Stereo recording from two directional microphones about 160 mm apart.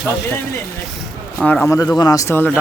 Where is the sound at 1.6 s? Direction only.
20° left (ahead or behind).